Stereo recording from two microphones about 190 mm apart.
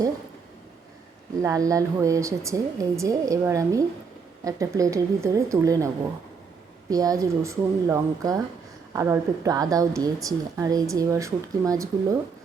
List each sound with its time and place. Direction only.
1.4 s a woman's voice: 15° right (ahead or behind)
6.9 s a woman's voice: 20° right (ahead or behind)